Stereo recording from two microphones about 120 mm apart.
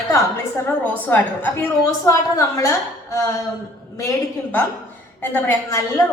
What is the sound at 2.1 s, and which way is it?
Speech, 25° left (ahead or behind).